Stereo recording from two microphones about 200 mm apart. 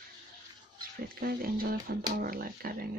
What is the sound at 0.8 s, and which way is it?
Speech, 50° right (ahead or behind).